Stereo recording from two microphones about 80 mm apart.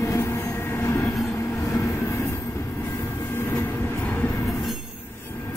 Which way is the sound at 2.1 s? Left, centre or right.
Left.